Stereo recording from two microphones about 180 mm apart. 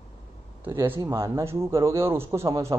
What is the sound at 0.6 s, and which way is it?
Speech, 10° right (ahead or behind).